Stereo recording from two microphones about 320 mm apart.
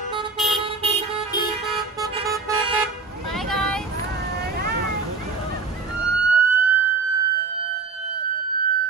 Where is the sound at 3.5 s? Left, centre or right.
Centre.